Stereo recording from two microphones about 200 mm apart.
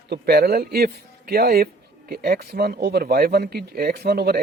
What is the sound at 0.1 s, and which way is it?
A man's voice, 50° right (ahead or behind).